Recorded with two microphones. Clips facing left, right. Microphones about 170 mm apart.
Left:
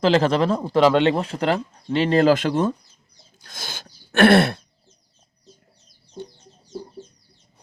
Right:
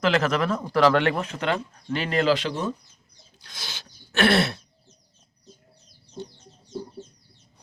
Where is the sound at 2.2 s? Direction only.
50° left (ahead or behind).